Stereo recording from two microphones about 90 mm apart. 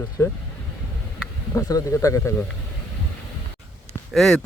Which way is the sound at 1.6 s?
40° left (ahead or behind).